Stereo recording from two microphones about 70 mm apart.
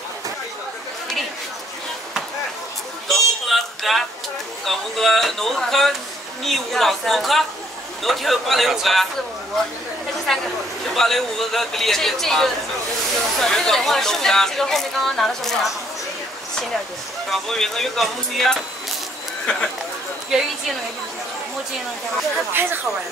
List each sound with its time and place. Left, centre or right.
3.1 s a sound: centre
4.6 s speech: centre
10.3 s speech: centre
17.3 s speech: centre
20.2 s speech: centre
22.5 s speech: right